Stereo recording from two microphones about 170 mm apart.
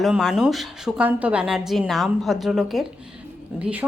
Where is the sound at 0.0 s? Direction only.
Centre (ahead or behind).